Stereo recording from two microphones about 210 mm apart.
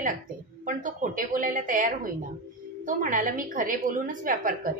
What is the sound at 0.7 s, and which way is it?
A woman's voice, 40° right (ahead or behind).